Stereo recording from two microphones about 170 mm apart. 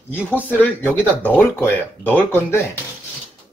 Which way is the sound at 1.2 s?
10° left (ahead or behind).